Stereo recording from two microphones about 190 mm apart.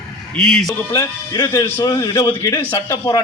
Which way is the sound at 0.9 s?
20° left (ahead or behind).